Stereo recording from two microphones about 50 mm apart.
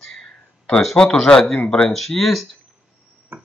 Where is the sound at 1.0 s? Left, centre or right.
Centre.